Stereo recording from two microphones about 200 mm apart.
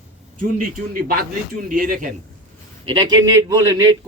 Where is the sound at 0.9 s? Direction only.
50° right (ahead or behind).